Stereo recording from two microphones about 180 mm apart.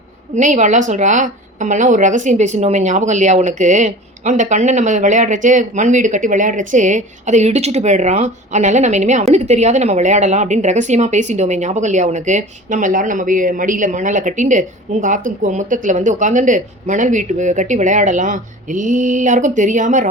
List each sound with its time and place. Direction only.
0.3 s a woman's voice: 40° right (ahead or behind)